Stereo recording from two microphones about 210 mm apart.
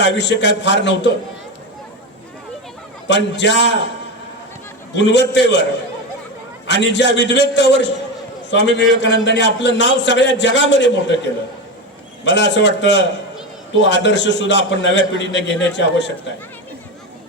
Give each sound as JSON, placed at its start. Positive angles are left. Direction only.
{"t": 0.0, "sound": "a man's voice", "side_deg": 55}
{"t": 3.3, "sound": "a man's voice", "side_deg": 60}
{"t": 4.9, "sound": "a man's voice", "side_deg": 60}
{"t": 6.7, "sound": "a man's voice", "side_deg": 55}